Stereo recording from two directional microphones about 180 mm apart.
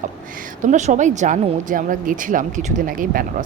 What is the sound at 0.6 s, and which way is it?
Speech, 40° right (ahead or behind).